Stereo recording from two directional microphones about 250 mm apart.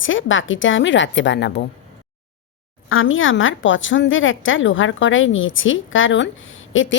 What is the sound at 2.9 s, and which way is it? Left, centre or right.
A woman's voice, left.